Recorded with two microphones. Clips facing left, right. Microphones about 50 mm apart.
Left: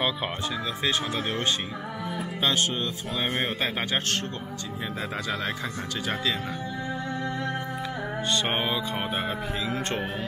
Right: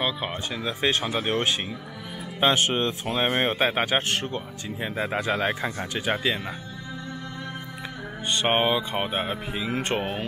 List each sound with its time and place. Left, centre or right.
0.8 s a man's voice: right
2.4 s a man's voice: right
8.3 s a man's voice: right